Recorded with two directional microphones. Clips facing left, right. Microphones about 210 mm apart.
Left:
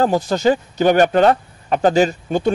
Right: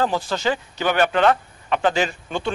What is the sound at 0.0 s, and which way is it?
Speech, 45° left (ahead or behind).